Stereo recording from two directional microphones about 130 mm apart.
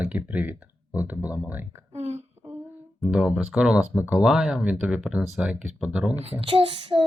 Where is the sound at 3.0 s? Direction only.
5° right (ahead or behind).